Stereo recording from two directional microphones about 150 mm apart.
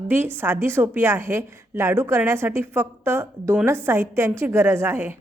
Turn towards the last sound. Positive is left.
turn(degrees=-15)  # may be behind; listen again after turning